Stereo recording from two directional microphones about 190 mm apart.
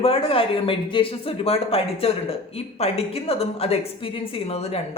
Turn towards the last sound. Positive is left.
turn(degrees=35)  # may be behind; listen again after turning